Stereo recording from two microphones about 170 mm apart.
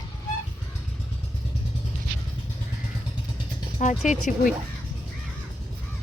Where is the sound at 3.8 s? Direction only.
45° left (ahead or behind).